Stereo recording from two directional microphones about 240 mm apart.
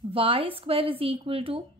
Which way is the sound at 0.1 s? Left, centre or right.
Right.